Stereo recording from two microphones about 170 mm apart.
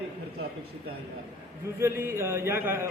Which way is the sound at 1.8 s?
15° right (ahead or behind).